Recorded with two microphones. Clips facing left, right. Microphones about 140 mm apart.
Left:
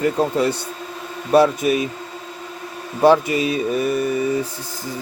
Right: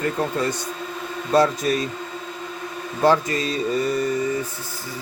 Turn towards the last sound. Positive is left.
turn(degrees=10)  # may be behind; listen again after turning